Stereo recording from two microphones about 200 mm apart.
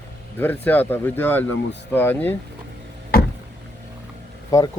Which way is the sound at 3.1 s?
50° left (ahead or behind).